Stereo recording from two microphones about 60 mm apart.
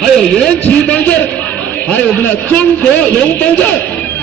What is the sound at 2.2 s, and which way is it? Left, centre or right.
A man's voice, left.